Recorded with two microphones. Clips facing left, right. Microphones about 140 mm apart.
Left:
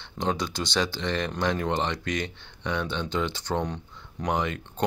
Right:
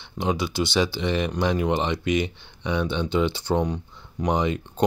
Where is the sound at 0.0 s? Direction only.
10° right (ahead or behind).